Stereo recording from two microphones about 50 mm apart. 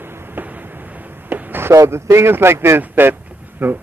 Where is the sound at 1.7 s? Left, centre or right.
Right.